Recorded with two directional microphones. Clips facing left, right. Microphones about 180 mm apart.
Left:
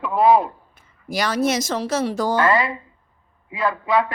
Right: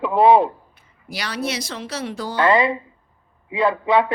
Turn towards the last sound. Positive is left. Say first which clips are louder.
# right 3 dB
turn(degrees=-25)  # may be behind; listen again after turning